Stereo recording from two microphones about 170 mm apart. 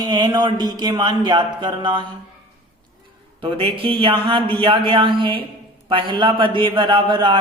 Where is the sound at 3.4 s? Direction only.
30° right (ahead or behind).